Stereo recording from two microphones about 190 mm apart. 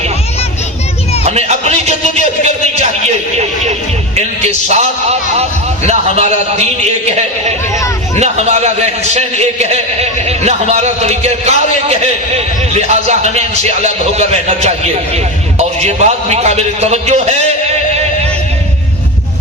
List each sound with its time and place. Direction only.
1.2 s music: 35° right (ahead or behind)
2.4 s a sound: 40° right (ahead or behind)
3.3 s speech: 35° right (ahead or behind)
8.2 s a man's voice: 35° right (ahead or behind)